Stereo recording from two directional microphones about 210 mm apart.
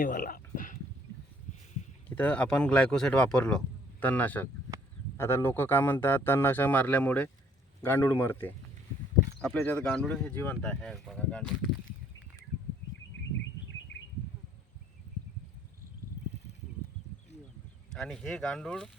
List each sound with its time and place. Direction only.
0.0 s a sound: 40° left (ahead or behind)
2.0 s a man's voice: 5° left (ahead or behind)
17.9 s speech: 5° left (ahead or behind)